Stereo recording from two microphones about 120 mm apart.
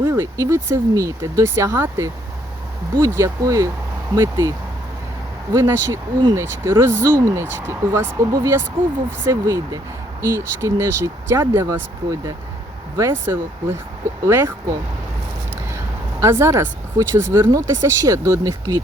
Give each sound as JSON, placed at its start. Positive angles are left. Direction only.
{"t": 0.0, "sound": "speech", "side_deg": -20}
{"t": 5.5, "sound": "speech", "side_deg": -25}
{"t": 13.0, "sound": "speech", "side_deg": -20}
{"t": 16.2, "sound": "speech", "side_deg": -20}